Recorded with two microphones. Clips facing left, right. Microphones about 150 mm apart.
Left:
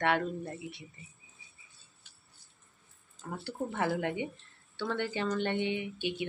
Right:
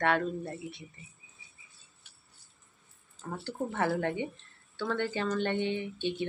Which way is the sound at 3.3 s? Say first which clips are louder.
Right 1 dB; 10° left (ahead or behind).